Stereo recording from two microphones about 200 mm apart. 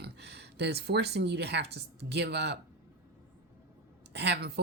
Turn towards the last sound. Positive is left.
turn(degrees=-55)  # may be behind; listen again after turning